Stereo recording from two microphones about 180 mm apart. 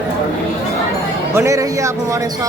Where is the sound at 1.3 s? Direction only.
15° right (ahead or behind).